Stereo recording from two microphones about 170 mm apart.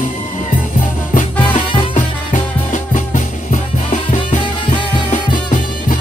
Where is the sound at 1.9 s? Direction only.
50° left (ahead or behind).